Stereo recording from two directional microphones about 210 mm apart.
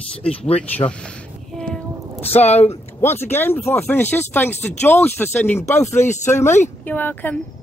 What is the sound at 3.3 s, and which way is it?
Speech, 10° left (ahead or behind).